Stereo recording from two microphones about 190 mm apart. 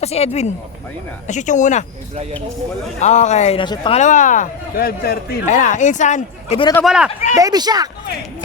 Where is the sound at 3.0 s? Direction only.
40° left (ahead or behind).